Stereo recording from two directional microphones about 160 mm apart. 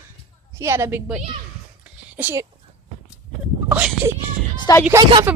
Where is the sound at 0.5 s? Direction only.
15° right (ahead or behind).